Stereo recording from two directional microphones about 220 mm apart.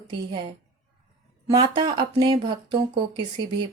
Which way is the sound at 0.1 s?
20° right (ahead or behind).